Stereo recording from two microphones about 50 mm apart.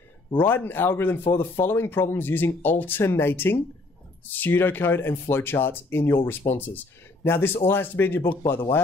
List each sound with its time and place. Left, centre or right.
0.3 s speech: left
3.0 s speech: left
7.2 s speech: left